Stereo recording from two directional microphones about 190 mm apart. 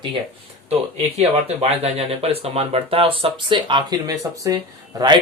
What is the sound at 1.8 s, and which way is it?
Speech, 30° right (ahead or behind).